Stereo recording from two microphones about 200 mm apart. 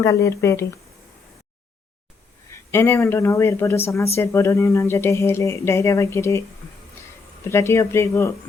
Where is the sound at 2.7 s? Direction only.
15° left (ahead or behind).